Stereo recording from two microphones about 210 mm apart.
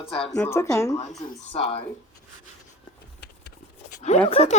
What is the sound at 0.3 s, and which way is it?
Speech, 10° left (ahead or behind).